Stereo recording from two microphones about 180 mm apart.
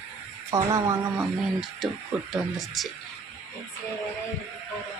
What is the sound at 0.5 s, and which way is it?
Speech, 20° right (ahead or behind).